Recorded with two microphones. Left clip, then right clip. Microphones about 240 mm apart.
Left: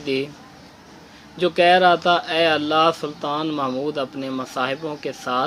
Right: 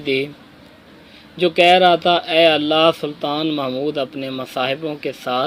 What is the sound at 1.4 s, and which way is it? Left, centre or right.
Speech, centre.